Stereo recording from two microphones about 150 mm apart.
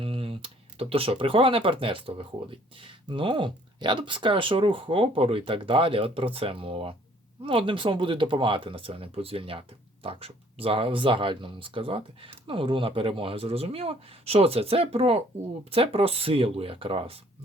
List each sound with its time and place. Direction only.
0.0 s speech: 40° right (ahead or behind)